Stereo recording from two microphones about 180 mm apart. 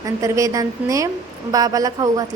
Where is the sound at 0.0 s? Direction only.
20° right (ahead or behind).